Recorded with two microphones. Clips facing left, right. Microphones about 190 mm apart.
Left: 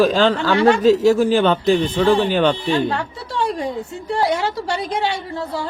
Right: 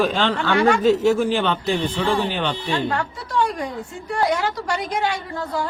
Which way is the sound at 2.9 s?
25° left (ahead or behind).